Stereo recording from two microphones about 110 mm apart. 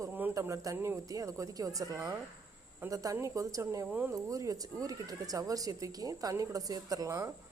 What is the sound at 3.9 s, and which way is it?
Speech, 15° right (ahead or behind).